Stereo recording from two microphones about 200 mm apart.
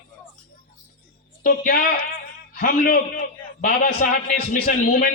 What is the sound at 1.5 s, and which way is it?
A man's voice, 45° left (ahead or behind).